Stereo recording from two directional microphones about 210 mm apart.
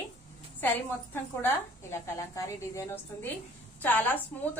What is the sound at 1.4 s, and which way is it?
A woman's voice, 15° left (ahead or behind).